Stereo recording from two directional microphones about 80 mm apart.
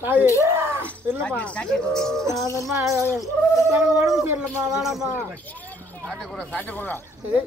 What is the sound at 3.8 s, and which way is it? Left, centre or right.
Speech, centre.